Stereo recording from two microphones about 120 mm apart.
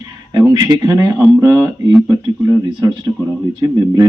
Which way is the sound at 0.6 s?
35° right (ahead or behind).